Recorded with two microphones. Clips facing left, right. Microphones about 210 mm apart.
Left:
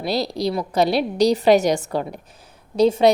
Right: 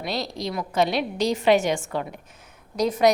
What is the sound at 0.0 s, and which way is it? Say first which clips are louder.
Speech: left 7 dB; 35° left (ahead or behind).